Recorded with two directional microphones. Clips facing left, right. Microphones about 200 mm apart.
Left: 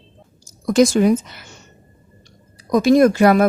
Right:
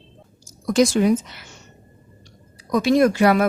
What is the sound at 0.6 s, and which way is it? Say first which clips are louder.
Speech: left 3 dB; 50° left (ahead or behind).